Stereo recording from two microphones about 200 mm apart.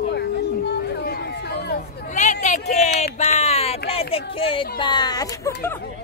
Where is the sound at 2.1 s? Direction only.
35° left (ahead or behind).